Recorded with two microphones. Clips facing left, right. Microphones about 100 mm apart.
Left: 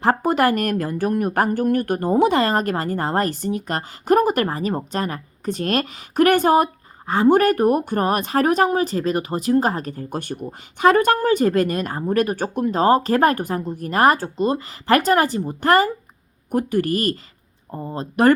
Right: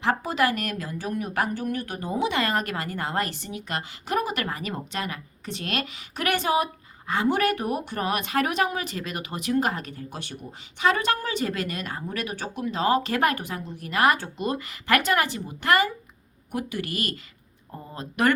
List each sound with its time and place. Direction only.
0.0 s a woman's voice: 45° left (ahead or behind)
2.4 s speech: 35° left (ahead or behind)
4.4 s a woman's voice: 35° left (ahead or behind)